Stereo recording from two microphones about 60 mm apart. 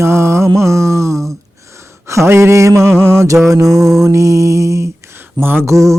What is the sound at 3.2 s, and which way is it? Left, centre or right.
Music, right.